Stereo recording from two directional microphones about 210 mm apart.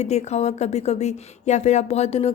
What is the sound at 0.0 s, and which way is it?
Speech, 30° left (ahead or behind).